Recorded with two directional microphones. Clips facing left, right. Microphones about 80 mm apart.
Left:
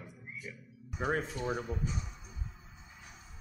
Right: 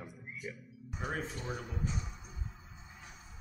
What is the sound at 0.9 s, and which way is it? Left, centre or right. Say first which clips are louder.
Speech: left 5 dB; left.